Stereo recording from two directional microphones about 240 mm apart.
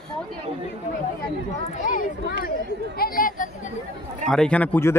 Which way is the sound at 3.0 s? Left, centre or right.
Left.